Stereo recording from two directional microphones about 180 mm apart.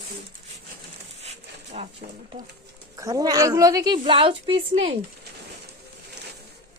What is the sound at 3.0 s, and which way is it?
A woman's voice, 20° right (ahead or behind).